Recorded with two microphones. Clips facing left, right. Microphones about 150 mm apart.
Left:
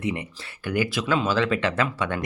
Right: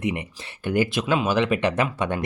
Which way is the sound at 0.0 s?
20° right (ahead or behind).